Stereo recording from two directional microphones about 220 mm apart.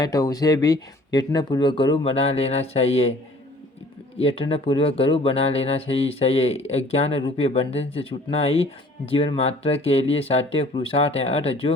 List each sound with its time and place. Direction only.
0.0 s speech: 15° left (ahead or behind)
4.2 s speech: 25° left (ahead or behind)